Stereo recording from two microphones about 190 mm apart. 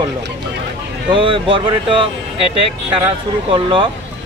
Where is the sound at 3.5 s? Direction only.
25° right (ahead or behind).